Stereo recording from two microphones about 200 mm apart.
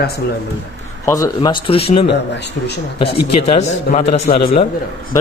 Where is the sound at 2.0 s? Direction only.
60° left (ahead or behind).